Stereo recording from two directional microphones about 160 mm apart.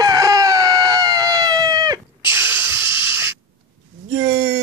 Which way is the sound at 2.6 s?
30° left (ahead or behind).